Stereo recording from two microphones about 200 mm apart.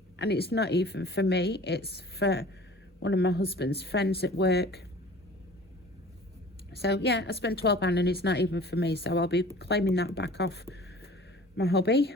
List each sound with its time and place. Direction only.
0.2 s a woman's voice: 55° left (ahead or behind)
6.7 s a woman's voice: 55° left (ahead or behind)